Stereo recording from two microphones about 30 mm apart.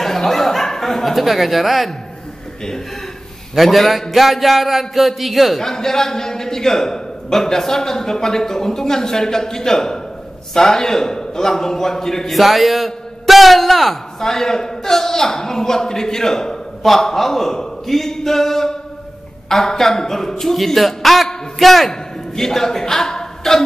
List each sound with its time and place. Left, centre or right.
0.0 s chuckle: centre
1.1 s a man's voice: centre
3.5 s a man's voice: centre
5.6 s a man's voice: centre
12.3 s a man's voice: centre
14.2 s a man's voice: centre
22.3 s speech: centre